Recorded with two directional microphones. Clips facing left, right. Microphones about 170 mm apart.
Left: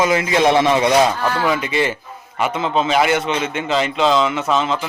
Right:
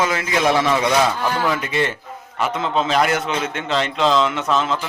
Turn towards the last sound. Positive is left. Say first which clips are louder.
# left 2 dB
turn(degrees=0)  # may be behind; listen again after turning